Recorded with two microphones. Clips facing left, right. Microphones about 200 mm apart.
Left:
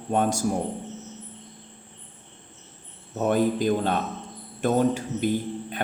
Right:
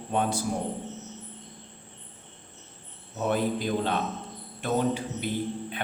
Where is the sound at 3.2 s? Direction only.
45° left (ahead or behind).